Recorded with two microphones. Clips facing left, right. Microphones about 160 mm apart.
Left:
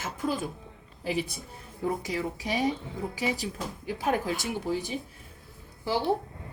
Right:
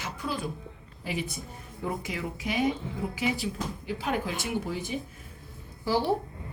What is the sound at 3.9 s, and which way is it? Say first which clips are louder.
Speech: left 3 dB; 40° left (ahead or behind).